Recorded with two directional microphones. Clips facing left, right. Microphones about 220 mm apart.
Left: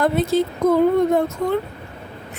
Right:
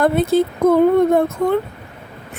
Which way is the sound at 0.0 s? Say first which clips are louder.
Right 3 dB; 60° right (ahead or behind).